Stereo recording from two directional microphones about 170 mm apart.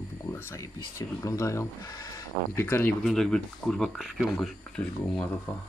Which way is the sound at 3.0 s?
5° left (ahead or behind).